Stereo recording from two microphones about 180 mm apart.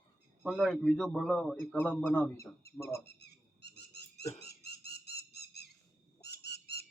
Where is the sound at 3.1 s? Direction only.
65° left (ahead or behind).